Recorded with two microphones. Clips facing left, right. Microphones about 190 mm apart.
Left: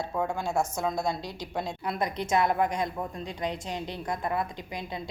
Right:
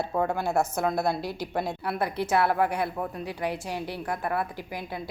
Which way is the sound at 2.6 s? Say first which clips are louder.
Right 2 dB; 10° right (ahead or behind).